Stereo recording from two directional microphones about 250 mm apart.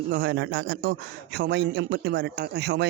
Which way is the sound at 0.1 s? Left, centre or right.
Right.